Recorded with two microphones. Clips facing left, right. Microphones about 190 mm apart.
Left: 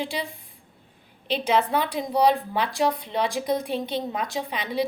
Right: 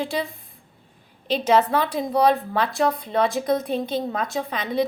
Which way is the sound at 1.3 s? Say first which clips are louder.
Right 4 dB; 40° right (ahead or behind).